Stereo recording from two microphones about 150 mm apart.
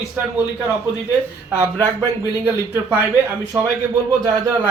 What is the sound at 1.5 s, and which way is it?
Speech, 15° right (ahead or behind).